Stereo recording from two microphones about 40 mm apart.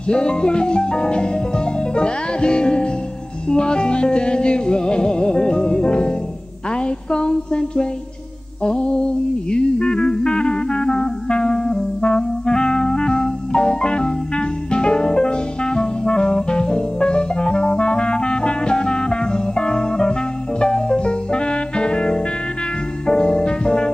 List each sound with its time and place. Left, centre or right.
0.1 s music: left